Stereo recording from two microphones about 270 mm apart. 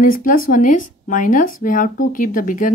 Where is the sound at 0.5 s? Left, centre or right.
Left.